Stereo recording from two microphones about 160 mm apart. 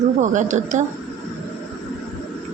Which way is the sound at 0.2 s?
50° right (ahead or behind).